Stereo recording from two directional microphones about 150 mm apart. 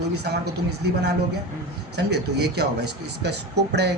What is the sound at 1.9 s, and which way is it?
Speech, 90° right.